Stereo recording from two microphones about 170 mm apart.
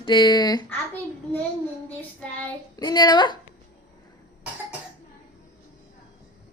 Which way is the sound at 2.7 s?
25° left (ahead or behind).